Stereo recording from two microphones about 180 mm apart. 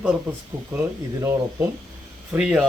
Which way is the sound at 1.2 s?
15° right (ahead or behind).